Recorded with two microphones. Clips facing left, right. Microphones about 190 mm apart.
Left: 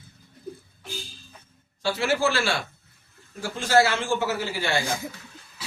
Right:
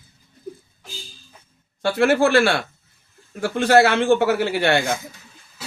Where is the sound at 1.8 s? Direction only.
55° right (ahead or behind).